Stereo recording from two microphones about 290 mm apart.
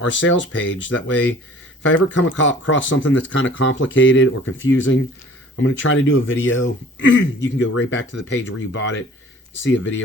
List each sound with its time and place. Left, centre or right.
0.0 s speech: left